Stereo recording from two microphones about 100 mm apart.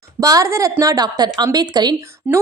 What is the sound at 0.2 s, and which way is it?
Speech, 35° right (ahead or behind).